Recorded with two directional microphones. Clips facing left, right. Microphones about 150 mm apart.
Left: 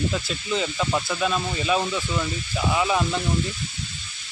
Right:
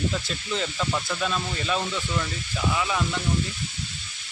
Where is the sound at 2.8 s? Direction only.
25° left (ahead or behind).